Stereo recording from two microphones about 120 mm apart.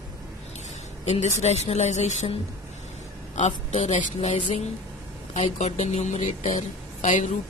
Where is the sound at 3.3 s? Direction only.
60° left (ahead or behind).